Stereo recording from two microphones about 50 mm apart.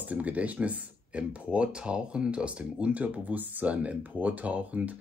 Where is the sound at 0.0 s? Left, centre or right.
Right.